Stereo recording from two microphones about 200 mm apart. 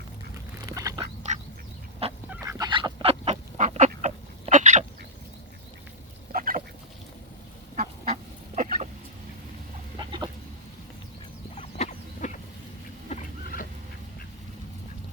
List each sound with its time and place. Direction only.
0.8 s duck: 15° right (ahead or behind)
1.2 s duck: 35° right (ahead or behind)
2.3 s goose: 15° right (ahead or behind); by 4.9 s 35° right (ahead or behind)
6.3 s chicken: 45° right (ahead or behind)
7.8 s duck: 40° right (ahead or behind)
10.0 s chicken: 20° right (ahead or behind)
11.5 s a sound: 30° left (ahead or behind)